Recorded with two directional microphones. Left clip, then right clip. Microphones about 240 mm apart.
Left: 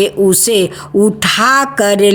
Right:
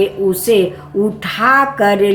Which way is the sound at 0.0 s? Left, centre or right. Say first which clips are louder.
Left 3 dB; left.